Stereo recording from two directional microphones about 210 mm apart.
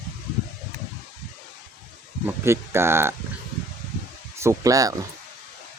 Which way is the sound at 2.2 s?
10° right (ahead or behind).